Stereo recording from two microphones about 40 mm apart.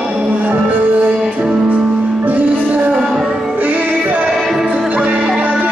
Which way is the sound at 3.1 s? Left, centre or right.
Centre.